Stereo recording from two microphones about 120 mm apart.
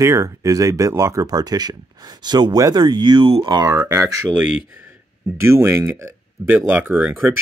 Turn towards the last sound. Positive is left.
turn(degrees=-15)  # may be behind; listen again after turning